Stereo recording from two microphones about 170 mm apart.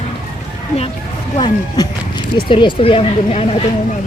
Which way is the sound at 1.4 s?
25° left (ahead or behind).